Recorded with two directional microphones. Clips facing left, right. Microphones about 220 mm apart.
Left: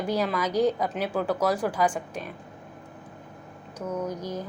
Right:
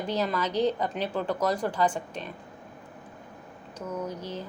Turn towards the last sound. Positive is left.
turn(degrees=10)  # may be behind; listen again after turning